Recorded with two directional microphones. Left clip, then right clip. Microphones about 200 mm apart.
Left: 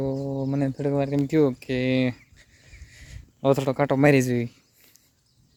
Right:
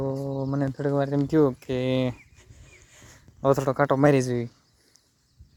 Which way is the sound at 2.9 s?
Centre (ahead or behind).